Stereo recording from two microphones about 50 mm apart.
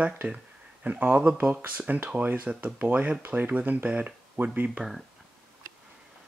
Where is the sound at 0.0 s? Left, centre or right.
Right.